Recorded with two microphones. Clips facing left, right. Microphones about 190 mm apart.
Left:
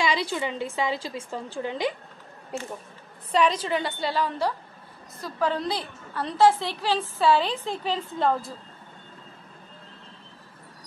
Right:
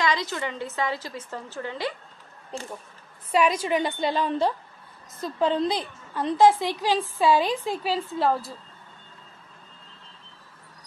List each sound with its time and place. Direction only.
0.0 s a woman's voice: 10° left (ahead or behind)
3.3 s a woman's voice: 10° right (ahead or behind)